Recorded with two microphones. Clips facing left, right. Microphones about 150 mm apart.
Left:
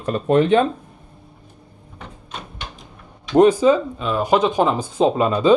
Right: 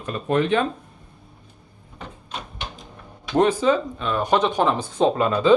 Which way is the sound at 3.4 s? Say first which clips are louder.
Left 5 dB; 10° left (ahead or behind).